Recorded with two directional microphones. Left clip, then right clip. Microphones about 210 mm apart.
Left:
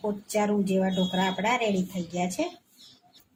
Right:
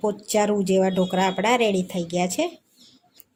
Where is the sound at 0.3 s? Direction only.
45° right (ahead or behind).